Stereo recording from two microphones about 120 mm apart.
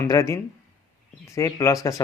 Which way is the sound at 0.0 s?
25° left (ahead or behind).